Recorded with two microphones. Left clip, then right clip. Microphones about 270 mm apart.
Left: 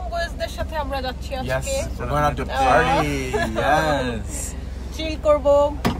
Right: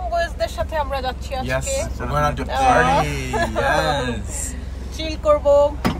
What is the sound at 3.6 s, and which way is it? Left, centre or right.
Speech, left.